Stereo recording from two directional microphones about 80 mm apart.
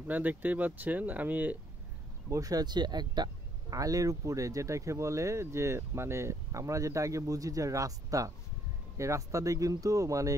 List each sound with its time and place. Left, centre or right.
0.1 s speech: right
2.2 s speech: right
3.7 s speech: right